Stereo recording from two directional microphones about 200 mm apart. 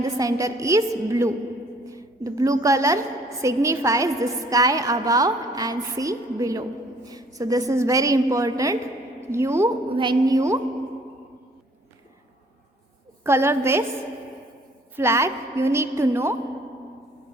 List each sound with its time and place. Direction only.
0.0 s a woman's voice: 15° right (ahead or behind)
9.9 s a woman's voice: 25° right (ahead or behind)
13.2 s a woman's voice: 10° right (ahead or behind)
14.9 s a woman's voice: 15° right (ahead or behind)